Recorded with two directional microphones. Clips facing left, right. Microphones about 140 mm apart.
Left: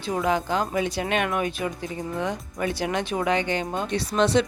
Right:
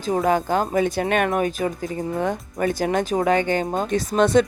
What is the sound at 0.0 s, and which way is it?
Speech, 45° right (ahead or behind).